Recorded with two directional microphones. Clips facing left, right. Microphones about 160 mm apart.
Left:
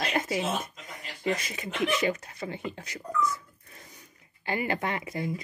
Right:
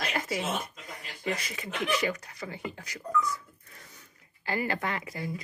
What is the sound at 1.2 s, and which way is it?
Speech, 25° left (ahead or behind).